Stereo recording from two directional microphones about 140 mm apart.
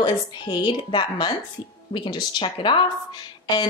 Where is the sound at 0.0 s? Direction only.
35° left (ahead or behind).